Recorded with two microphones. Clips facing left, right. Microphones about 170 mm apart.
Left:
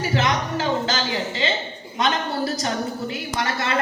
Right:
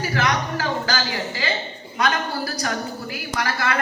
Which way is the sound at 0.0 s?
25° left (ahead or behind).